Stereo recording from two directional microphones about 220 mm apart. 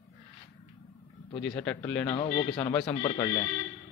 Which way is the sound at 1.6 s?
5° left (ahead or behind).